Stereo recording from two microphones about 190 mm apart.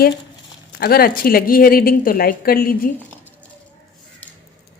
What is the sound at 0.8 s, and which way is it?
A woman's voice, 55° left (ahead or behind).